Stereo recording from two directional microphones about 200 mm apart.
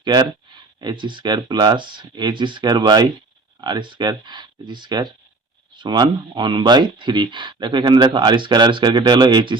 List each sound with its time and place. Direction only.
0.0 s speech: 20° right (ahead or behind)